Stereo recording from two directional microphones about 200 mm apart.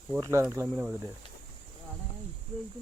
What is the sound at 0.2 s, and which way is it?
Speech, 15° right (ahead or behind).